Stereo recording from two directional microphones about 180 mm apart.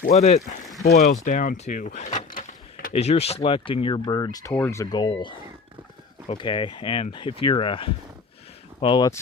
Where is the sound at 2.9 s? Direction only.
35° left (ahead or behind).